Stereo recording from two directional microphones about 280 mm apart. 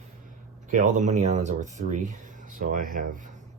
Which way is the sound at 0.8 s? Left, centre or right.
Right.